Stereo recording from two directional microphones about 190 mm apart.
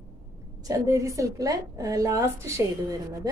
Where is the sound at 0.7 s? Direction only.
15° right (ahead or behind).